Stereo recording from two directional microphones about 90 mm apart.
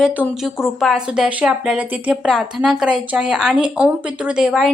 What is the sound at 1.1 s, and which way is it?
Speech, 10° right (ahead or behind).